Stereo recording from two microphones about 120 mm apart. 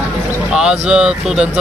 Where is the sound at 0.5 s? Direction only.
5° right (ahead or behind).